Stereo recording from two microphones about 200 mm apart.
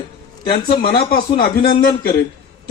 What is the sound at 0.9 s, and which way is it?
Speech, 25° left (ahead or behind).